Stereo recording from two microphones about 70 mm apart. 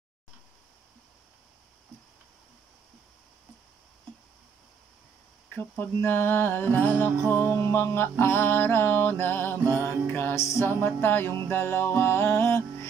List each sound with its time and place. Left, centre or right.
5.5 s music: left
10.3 s music: left
10.9 s music: left